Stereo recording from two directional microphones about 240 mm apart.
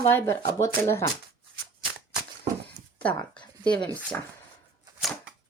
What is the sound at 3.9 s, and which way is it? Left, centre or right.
Speech, centre.